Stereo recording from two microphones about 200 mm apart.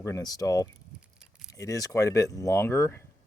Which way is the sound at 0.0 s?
15° left (ahead or behind).